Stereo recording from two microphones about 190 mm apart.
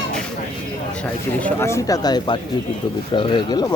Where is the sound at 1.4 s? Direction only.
10° left (ahead or behind).